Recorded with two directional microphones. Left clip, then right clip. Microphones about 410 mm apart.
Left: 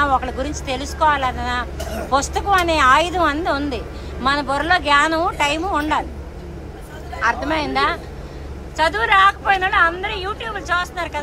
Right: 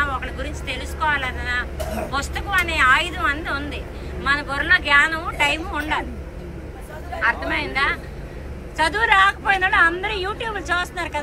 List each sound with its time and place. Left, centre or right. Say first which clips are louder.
0.0 s speech: left 6 dB; centre
7.2 s a woman's voice: left 2 dB; centre